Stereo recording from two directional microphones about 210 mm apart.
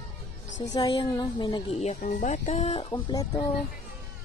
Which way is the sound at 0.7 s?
20° left (ahead or behind).